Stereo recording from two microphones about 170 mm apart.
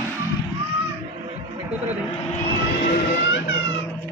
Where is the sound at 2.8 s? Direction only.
65° left (ahead or behind).